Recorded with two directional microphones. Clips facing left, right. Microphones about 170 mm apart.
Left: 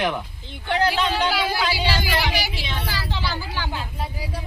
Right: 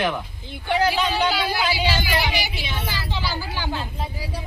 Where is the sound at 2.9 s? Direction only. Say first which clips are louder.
Even; centre (ahead or behind).